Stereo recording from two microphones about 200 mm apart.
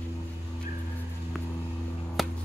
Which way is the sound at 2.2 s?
Centre (ahead or behind).